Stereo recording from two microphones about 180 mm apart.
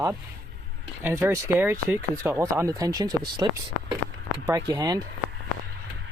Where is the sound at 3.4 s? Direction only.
20° right (ahead or behind).